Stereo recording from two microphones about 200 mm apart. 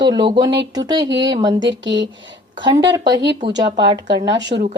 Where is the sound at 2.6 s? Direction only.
20° right (ahead or behind).